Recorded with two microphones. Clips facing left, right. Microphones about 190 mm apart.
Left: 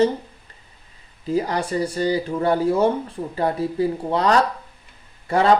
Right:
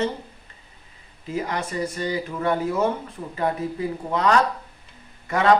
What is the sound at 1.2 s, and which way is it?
Speech, 35° left (ahead or behind).